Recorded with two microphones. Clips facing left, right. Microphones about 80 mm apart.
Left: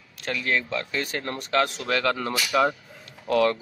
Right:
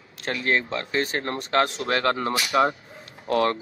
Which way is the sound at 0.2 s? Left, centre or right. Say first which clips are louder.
Right 2 dB; right.